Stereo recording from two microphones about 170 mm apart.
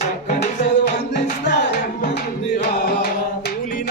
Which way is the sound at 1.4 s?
90° left.